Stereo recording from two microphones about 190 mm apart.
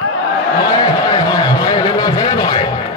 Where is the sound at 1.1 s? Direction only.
25° left (ahead or behind).